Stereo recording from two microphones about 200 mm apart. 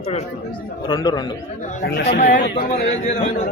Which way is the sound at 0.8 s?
20° left (ahead or behind).